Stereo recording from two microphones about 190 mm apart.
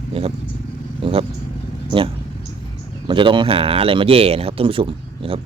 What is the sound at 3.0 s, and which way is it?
Speech, 25° right (ahead or behind).